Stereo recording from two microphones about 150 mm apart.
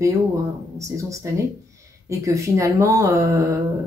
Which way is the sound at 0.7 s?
20° right (ahead or behind).